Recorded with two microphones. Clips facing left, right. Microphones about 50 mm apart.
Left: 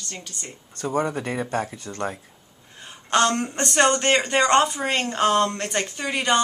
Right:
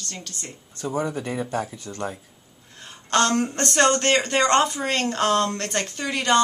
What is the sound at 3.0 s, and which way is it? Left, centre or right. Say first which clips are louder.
Speech: even; centre.